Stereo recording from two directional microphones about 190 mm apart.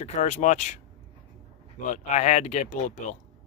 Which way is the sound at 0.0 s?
40° left (ahead or behind).